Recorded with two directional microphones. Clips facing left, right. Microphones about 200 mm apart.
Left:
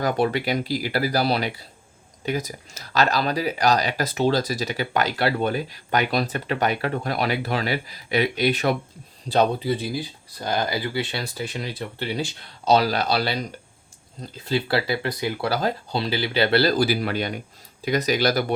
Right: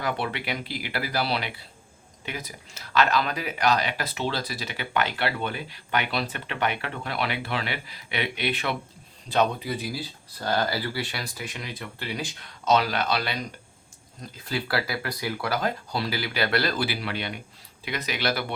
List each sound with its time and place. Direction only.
0.0 s speech: 40° left (ahead or behind)
10.4 s speech: 15° left (ahead or behind); by 18.5 s 40° left (ahead or behind)